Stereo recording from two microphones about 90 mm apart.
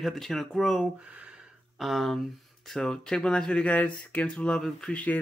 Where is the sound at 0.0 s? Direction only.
Centre (ahead or behind).